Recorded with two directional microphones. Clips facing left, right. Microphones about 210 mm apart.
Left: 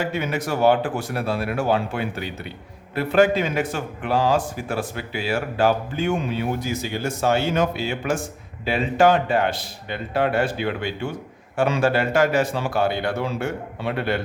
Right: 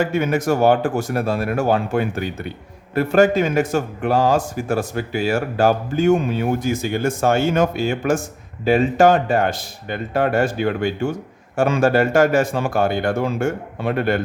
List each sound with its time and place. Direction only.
0.0 s a man's voice: 50° right (ahead or behind)